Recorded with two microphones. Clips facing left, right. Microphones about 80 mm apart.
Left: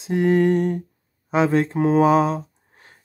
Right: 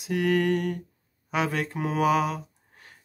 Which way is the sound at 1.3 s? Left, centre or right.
Left.